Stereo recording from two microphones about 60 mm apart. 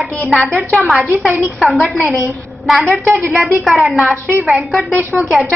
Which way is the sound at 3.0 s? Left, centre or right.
Right.